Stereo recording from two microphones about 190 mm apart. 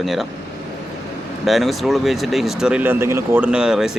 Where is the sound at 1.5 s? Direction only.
Centre (ahead or behind).